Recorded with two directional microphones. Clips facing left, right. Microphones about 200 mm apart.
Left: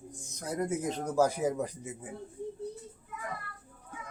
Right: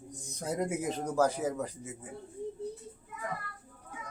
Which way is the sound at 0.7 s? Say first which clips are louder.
Left 1 dB; 5° right (ahead or behind).